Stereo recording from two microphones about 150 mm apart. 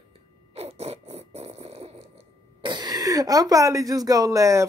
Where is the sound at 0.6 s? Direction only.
45° right (ahead or behind).